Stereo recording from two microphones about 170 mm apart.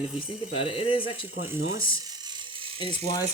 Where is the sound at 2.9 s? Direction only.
25° left (ahead or behind).